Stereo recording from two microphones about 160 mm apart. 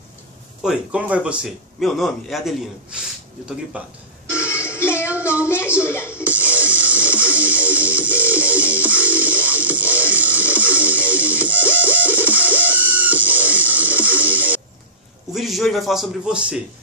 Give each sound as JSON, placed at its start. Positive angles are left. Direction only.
{"t": 0.6, "sound": "a man's voice", "side_deg": -5}
{"t": 3.8, "sound": "speech", "side_deg": -10}
{"t": 4.3, "sound": "music", "side_deg": 15}
{"t": 5.2, "sound": "a sound", "side_deg": 15}
{"t": 5.8, "sound": "speech", "side_deg": 15}
{"t": 6.2, "sound": "music", "side_deg": -10}
{"t": 14.1, "sound": "a sound", "side_deg": -10}
{"t": 15.3, "sound": "a man's voice", "side_deg": 0}